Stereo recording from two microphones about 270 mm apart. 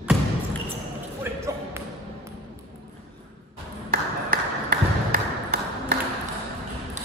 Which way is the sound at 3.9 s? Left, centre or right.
Right.